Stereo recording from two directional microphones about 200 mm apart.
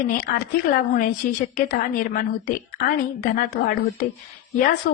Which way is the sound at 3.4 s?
45° left (ahead or behind).